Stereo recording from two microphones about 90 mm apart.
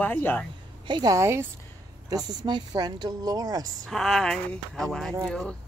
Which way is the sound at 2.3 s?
55° right (ahead or behind).